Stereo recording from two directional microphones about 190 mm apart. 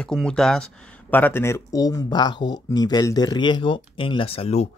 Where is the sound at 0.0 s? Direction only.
5° left (ahead or behind).